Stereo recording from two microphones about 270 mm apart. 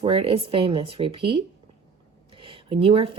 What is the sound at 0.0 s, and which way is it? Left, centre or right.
Speech, right.